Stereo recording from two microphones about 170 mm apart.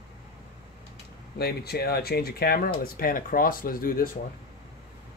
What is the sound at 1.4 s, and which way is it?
Speech, 70° left (ahead or behind).